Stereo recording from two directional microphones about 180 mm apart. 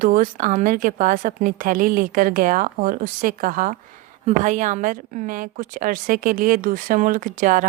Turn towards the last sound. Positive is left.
turn(degrees=-45)  # may be behind; listen again after turning